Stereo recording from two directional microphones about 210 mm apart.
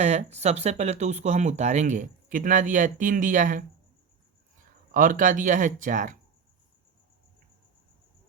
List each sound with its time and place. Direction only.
0.0 s speech: 35° right (ahead or behind)
4.9 s speech: 40° right (ahead or behind)